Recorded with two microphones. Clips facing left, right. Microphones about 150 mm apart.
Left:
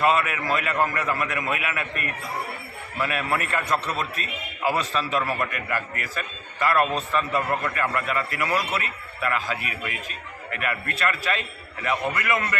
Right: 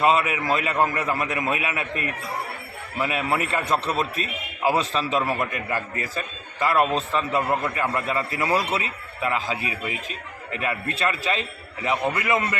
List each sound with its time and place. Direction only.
0.0 s a man's voice: 20° right (ahead or behind)